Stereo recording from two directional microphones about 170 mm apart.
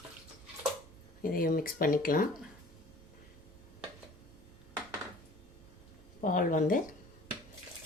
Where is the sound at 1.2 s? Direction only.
60° left (ahead or behind).